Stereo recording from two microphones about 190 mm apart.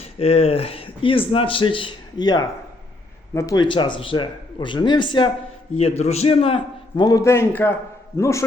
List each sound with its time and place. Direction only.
0.0 s a man's voice: 30° left (ahead or behind)
6.0 s a man's voice: 35° left (ahead or behind); by 8.4 s 15° left (ahead or behind)